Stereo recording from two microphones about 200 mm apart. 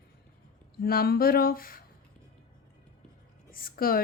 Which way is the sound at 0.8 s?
50° left (ahead or behind).